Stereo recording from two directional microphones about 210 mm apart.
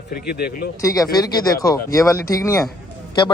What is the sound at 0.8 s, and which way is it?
Speech, 15° left (ahead or behind).